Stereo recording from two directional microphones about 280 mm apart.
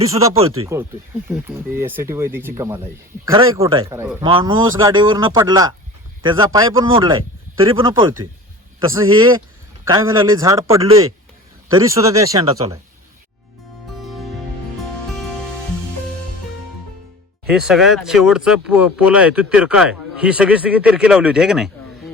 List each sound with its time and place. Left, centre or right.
0.1 s speech: centre
4.2 s speech: centre
14.0 s music: centre
17.5 s speech: centre